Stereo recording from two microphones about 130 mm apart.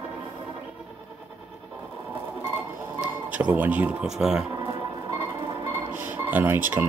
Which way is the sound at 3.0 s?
10° right (ahead or behind).